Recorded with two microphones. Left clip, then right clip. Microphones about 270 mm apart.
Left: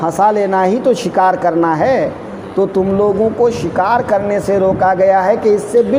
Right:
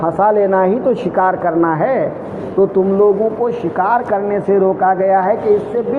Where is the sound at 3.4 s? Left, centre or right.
Left.